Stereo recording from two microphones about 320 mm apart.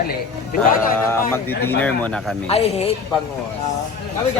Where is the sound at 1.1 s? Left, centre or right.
Centre.